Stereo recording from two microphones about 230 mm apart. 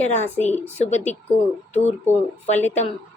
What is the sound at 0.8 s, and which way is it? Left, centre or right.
Speech, left.